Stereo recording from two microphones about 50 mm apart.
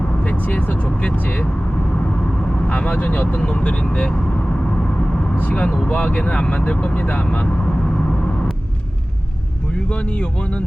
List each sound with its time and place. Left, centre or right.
0.2 s speech: left
5.4 s speech: left
9.9 s speech: left